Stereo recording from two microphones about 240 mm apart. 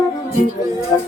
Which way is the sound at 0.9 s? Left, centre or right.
Centre.